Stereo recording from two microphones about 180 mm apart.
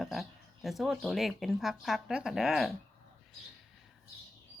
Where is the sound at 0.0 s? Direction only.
Centre (ahead or behind).